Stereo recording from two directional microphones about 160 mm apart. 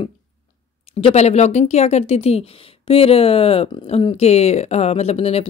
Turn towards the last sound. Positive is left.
turn(degrees=40)  # may be behind; listen again after turning